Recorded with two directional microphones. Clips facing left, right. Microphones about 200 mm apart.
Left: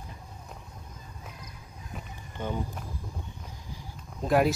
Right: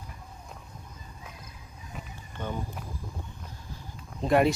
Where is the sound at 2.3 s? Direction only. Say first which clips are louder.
Left 2 dB; 15° left (ahead or behind).